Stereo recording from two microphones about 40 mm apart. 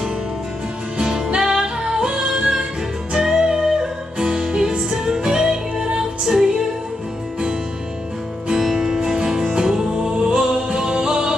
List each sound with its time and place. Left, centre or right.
1.0 s music: centre
8.5 s music: centre